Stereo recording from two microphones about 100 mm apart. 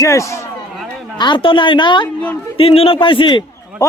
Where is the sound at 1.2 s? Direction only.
55° left (ahead or behind).